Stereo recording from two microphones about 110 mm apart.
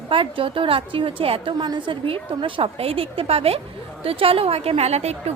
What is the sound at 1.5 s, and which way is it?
A woman's voice, 40° right (ahead or behind).